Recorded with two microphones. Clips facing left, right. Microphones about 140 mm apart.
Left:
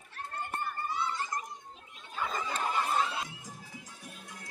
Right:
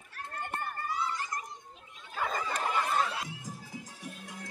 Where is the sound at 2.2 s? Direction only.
45° right (ahead or behind).